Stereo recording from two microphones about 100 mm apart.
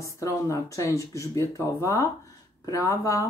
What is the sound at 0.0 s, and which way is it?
Speech, 30° left (ahead or behind).